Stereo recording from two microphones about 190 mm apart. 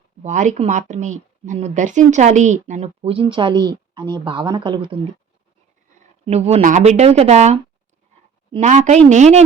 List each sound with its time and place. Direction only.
0.2 s a woman's voice: 40° right (ahead or behind)
6.2 s a woman's voice: 35° right (ahead or behind)